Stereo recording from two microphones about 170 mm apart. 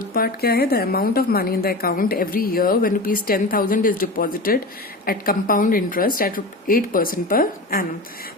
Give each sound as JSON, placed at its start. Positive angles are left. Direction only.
{"t": 0.1, "sound": "a woman's voice", "side_deg": 60}